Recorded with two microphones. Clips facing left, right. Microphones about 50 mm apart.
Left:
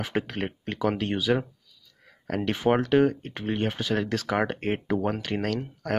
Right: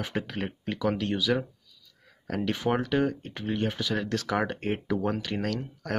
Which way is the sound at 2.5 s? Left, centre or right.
Left.